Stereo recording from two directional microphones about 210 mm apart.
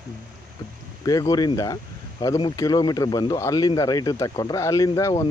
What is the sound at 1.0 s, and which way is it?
Speech, 15° left (ahead or behind).